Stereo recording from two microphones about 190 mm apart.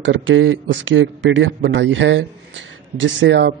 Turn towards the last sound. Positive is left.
turn(degrees=-70)  # may be behind; listen again after turning